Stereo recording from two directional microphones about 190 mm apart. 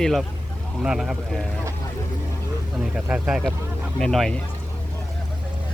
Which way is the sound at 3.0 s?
5° right (ahead or behind).